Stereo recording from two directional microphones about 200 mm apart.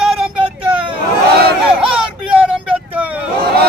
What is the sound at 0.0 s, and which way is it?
Vehicle, 5° right (ahead or behind).